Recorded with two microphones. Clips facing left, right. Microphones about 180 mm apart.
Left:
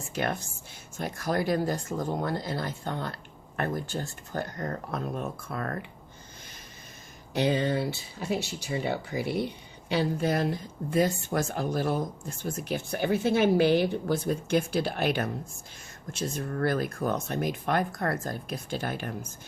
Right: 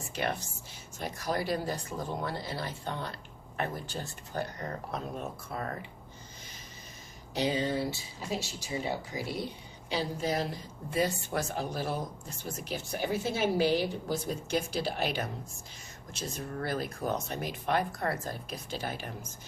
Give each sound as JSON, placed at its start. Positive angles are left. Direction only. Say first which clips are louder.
{"t": 0.1, "sound": "speech", "louder": "left 3 dB", "side_deg": 50}
{"t": 7.3, "sound": "a woman's voice", "louder": "left 4 dB", "side_deg": 60}